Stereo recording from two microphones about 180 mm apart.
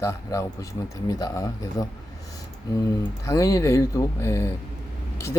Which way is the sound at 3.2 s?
15° left (ahead or behind).